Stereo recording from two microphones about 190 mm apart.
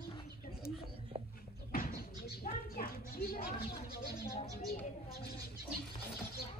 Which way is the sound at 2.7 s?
50° left (ahead or behind).